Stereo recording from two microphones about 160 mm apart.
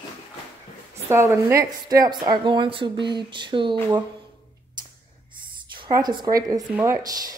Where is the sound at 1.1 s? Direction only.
15° right (ahead or behind).